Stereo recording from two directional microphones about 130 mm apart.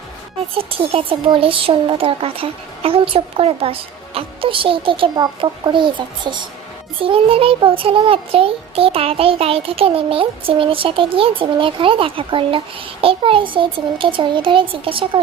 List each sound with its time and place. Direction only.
0.5 s child singing: 45° right (ahead or behind)